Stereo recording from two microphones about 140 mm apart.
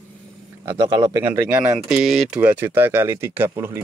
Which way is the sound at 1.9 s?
Centre (ahead or behind).